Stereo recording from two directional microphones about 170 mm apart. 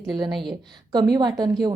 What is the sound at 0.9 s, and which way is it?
Speech, 25° right (ahead or behind).